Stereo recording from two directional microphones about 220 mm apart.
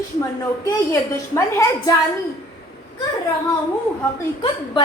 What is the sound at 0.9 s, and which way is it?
A woman's voice, 15° left (ahead or behind).